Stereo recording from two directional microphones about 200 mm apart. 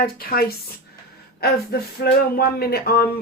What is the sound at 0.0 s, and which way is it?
Speech, 45° left (ahead or behind).